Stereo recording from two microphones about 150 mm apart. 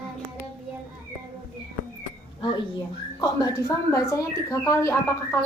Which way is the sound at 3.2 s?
25° left (ahead or behind).